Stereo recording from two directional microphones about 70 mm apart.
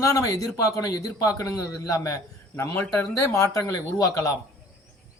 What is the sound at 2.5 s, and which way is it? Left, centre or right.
A man's voice, left.